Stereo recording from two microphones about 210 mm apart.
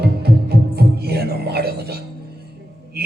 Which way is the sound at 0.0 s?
50° right (ahead or behind).